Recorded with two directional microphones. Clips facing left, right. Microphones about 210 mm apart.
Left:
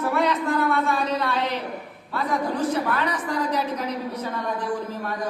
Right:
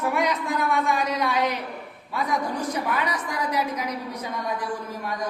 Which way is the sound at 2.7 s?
15° right (ahead or behind).